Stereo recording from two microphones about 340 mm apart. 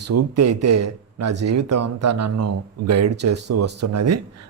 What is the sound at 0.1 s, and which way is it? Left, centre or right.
A man's voice, right.